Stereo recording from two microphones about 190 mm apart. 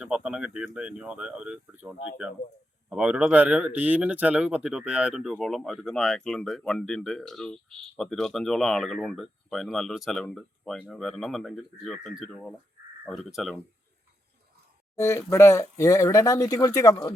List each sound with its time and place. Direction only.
0.0 s speech: 5° right (ahead or behind)
14.9 s speech: 15° left (ahead or behind)